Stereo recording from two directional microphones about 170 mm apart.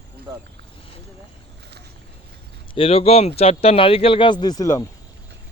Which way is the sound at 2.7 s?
35° left (ahead or behind).